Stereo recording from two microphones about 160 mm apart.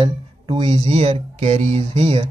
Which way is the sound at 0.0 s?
30° right (ahead or behind).